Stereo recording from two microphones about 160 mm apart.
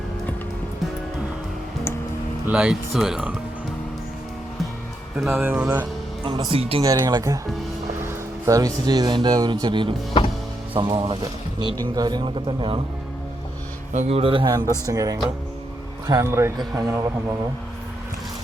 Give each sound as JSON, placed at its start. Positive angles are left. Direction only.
{"t": 2.5, "sound": "speech", "side_deg": -5}
{"t": 5.1, "sound": "speech", "side_deg": -5}
{"t": 6.2, "sound": "speech", "side_deg": -30}
{"t": 6.8, "sound": "speech", "side_deg": -25}
{"t": 8.4, "sound": "speech", "side_deg": -20}
{"t": 13.9, "sound": "speech", "side_deg": -40}